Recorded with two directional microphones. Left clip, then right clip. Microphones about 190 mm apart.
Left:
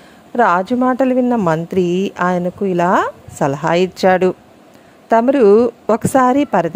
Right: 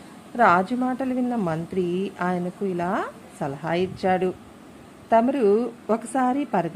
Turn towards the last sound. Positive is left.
turn(degrees=50)  # may be behind; listen again after turning